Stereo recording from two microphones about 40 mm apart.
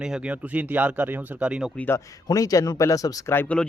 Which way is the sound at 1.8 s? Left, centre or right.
Left.